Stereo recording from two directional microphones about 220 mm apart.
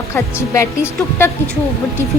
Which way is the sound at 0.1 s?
10° left (ahead or behind).